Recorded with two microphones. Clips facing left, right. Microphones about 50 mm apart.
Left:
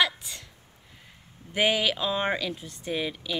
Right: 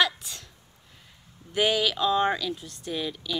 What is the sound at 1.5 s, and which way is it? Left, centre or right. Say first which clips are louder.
A woman's voice: even; centre.